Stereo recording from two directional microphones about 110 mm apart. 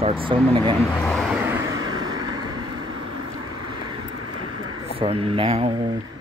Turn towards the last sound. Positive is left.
turn(degrees=-40)  # may be behind; listen again after turning